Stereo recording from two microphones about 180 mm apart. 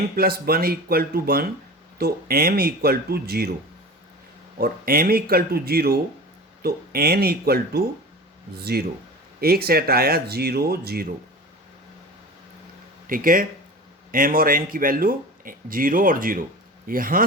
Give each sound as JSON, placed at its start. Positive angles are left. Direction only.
{"t": 0.2, "sound": "speech", "side_deg": -55}
{"t": 4.5, "sound": "speech", "side_deg": -55}
{"t": 13.1, "sound": "speech", "side_deg": -50}